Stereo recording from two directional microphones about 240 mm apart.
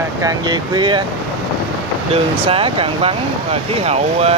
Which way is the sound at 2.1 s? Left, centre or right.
Right.